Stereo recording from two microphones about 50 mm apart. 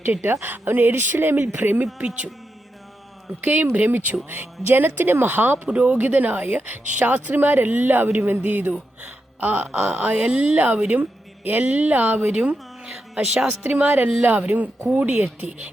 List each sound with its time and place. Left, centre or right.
0.0 s a woman's voice: right
2.0 s a woman's voice: right
3.4 s speech: right
5.6 s a woman's voice: right
13.3 s speech: centre
13.7 s speech: right